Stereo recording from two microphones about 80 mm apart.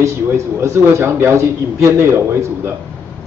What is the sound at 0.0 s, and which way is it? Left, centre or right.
A man's voice, right.